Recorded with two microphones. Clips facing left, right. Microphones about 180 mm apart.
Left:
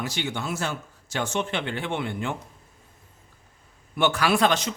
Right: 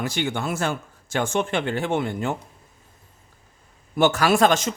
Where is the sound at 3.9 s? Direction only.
40° right (ahead or behind).